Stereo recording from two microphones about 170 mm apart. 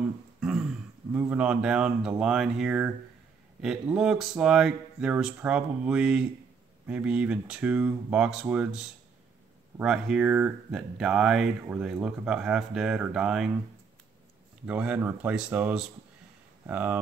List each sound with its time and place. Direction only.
0.4 s speech: 5° right (ahead or behind)
14.7 s speech: 5° right (ahead or behind)